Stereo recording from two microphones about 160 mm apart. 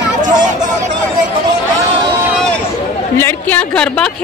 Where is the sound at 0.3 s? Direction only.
25° right (ahead or behind).